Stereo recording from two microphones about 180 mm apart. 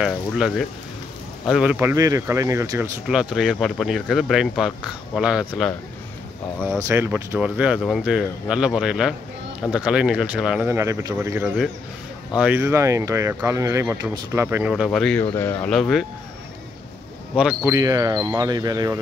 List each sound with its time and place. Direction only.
0.0 s speech: centre (ahead or behind); by 2.9 s 15° right (ahead or behind)
3.3 s speech: centre (ahead or behind)
6.9 s speech: 10° right (ahead or behind)
10.7 s speech: 15° right (ahead or behind)
14.7 s speech: centre (ahead or behind)
17.6 s speech: 20° right (ahead or behind)